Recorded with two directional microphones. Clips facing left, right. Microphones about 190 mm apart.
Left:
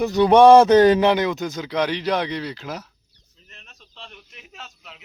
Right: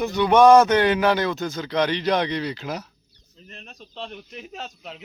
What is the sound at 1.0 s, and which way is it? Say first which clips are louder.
Speech: left 2 dB; 20° left (ahead or behind).